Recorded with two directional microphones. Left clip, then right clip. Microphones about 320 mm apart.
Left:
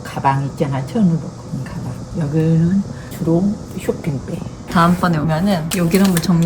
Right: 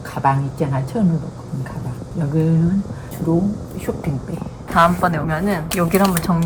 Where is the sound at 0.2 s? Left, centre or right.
Centre.